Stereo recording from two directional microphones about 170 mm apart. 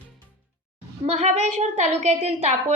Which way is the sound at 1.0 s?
40° right (ahead or behind).